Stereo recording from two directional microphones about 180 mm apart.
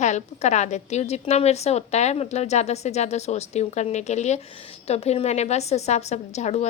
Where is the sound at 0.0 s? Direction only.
40° left (ahead or behind).